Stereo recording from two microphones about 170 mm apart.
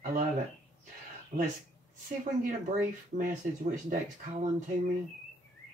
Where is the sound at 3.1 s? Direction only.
45° right (ahead or behind).